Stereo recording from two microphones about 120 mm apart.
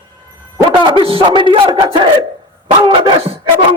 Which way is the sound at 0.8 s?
45° right (ahead or behind).